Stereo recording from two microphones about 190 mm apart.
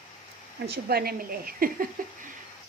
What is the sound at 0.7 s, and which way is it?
Speech, 55° right (ahead or behind).